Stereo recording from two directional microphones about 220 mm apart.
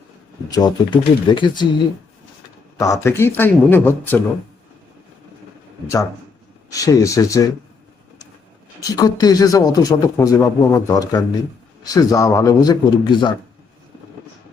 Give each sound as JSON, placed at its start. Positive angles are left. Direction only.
{"t": 0.5, "sound": "speech", "side_deg": 20}
{"t": 2.7, "sound": "speech", "side_deg": 15}
{"t": 6.7, "sound": "speech", "side_deg": 15}
{"t": 8.8, "sound": "speech", "side_deg": 15}